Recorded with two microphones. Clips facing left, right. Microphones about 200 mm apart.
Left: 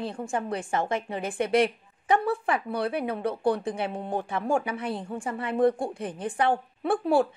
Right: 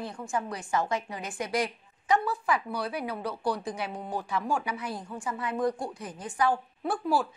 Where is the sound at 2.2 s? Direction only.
55° left (ahead or behind).